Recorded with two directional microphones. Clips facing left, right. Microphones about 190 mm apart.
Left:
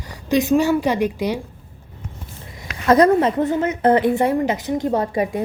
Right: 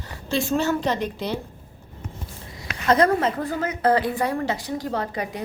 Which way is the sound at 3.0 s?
25° left (ahead or behind).